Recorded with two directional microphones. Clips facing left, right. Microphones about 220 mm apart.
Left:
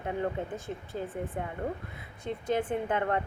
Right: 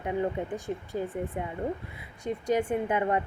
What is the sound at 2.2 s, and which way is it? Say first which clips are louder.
Speech: right 3 dB; 10° right (ahead or behind).